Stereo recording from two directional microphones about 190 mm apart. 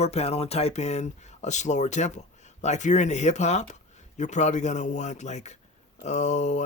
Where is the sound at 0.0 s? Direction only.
35° left (ahead or behind).